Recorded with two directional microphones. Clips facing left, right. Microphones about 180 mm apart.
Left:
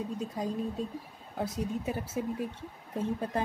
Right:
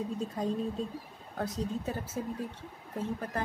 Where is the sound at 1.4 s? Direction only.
10° left (ahead or behind).